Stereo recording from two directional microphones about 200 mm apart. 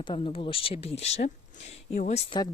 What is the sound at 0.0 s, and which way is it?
Speech, 25° left (ahead or behind).